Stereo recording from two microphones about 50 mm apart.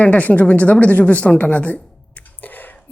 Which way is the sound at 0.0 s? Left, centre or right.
Left.